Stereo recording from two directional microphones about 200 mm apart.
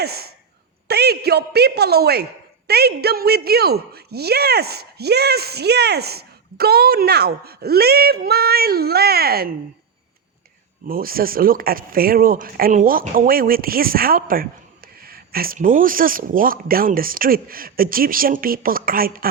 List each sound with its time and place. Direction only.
0.0 s speech: 50° right (ahead or behind)
10.8 s speech: 45° right (ahead or behind)